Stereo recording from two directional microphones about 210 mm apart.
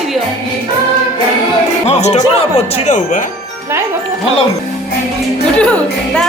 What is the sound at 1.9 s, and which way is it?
Speech, 30° left (ahead or behind).